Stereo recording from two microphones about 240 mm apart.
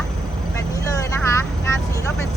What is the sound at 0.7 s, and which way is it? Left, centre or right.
Speech, centre.